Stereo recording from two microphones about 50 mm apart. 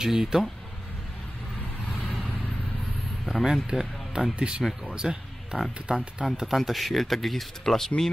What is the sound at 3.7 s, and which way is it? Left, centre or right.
Speech, centre.